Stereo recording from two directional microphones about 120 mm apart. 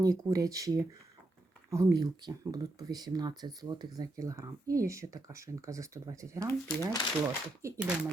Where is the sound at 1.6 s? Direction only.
30° right (ahead or behind).